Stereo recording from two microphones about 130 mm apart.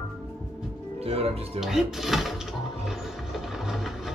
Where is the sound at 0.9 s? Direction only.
50° right (ahead or behind).